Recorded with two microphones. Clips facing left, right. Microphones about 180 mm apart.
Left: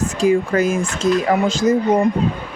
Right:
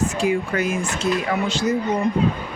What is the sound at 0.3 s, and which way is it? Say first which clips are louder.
Speech: left 10 dB; 45° left (ahead or behind).